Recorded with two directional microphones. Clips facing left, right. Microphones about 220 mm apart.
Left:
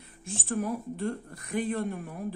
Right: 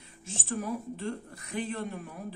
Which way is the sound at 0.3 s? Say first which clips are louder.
Left 3 dB; 50° left (ahead or behind).